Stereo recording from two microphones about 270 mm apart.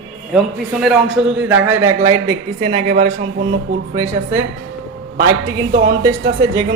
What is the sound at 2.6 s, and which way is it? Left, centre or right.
Speech, right.